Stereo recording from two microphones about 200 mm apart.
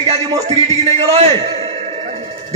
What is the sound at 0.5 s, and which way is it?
Speech, 35° right (ahead or behind).